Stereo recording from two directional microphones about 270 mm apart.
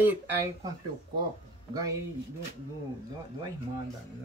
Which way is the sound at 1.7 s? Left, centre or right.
Centre.